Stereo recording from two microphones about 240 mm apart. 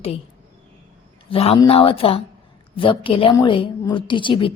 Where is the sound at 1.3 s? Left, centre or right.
Left.